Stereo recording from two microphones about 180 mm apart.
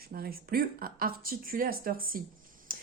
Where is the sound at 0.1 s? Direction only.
55° right (ahead or behind).